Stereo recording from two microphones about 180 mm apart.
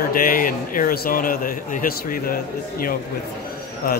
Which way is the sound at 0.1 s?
50° left (ahead or behind).